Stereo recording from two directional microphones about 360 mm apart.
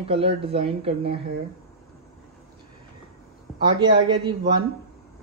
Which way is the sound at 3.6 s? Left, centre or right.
Centre.